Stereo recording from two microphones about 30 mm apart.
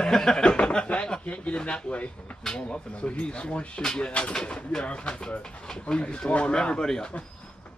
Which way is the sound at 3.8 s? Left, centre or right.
Left.